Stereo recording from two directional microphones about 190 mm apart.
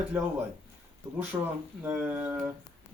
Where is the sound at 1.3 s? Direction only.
15° right (ahead or behind).